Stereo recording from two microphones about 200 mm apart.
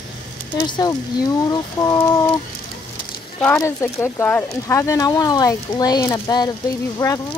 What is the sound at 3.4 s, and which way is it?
Speech, 10° left (ahead or behind).